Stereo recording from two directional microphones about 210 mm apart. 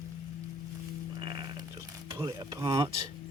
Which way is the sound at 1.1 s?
20° right (ahead or behind).